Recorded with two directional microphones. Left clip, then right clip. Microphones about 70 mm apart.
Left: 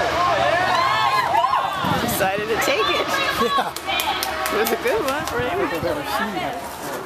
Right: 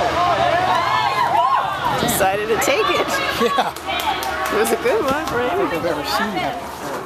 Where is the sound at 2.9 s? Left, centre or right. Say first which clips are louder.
Right 2 dB; right.